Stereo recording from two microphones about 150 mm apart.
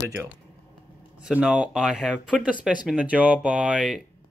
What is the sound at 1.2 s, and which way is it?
Speech, 5° right (ahead or behind).